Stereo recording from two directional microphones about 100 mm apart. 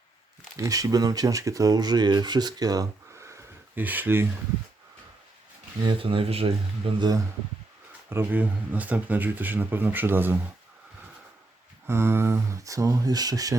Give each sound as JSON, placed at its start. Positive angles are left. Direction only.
{"t": 0.6, "sound": "speech", "side_deg": -35}
{"t": 3.8, "sound": "speech", "side_deg": -20}
{"t": 6.0, "sound": "speech", "side_deg": -65}
{"t": 8.1, "sound": "speech", "side_deg": -20}
{"t": 11.9, "sound": "speech", "side_deg": -25}